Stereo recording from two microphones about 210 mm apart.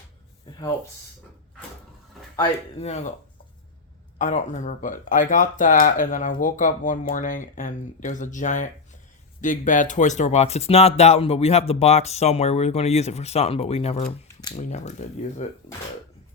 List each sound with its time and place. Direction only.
2.4 s speech: 30° left (ahead or behind)
4.2 s speech: 35° left (ahead or behind)